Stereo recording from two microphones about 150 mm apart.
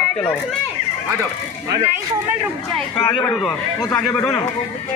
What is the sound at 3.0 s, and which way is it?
Speech, 35° left (ahead or behind).